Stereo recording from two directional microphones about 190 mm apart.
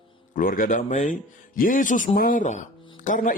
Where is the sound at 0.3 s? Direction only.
45° left (ahead or behind).